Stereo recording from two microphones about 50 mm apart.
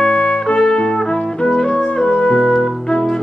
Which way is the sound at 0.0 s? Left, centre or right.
Left.